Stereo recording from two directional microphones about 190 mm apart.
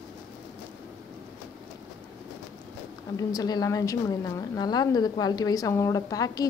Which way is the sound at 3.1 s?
20° left (ahead or behind).